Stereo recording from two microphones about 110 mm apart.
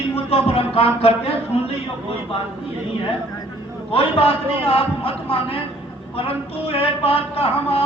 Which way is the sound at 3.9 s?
60° left (ahead or behind).